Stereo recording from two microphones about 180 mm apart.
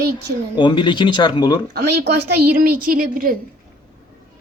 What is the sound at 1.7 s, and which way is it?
A woman's voice, 65° right (ahead or behind).